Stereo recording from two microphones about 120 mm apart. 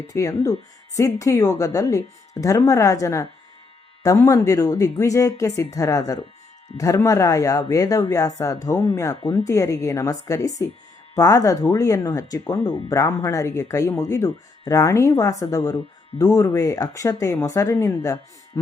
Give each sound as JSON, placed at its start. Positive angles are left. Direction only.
{"t": 0.1, "sound": "speech", "side_deg": 25}